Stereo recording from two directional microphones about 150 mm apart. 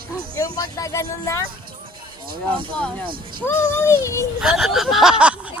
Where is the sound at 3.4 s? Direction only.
15° left (ahead or behind).